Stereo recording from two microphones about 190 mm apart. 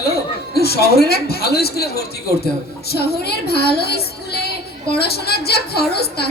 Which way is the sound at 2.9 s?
55° left (ahead or behind).